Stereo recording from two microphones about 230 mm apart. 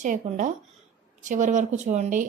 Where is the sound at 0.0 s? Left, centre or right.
Right.